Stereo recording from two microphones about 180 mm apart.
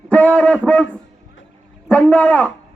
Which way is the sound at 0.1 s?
5° left (ahead or behind).